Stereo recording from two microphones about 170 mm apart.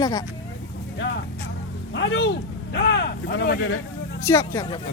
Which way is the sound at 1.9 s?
90° left.